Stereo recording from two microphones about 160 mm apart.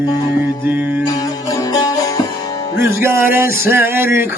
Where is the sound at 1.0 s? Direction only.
20° left (ahead or behind).